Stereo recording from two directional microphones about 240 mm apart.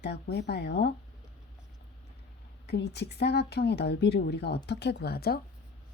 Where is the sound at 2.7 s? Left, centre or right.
Left.